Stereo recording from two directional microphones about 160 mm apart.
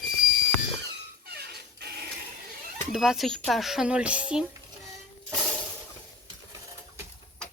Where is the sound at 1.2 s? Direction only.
80° right.